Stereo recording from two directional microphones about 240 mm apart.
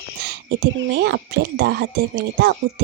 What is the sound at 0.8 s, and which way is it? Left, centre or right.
Speech, right.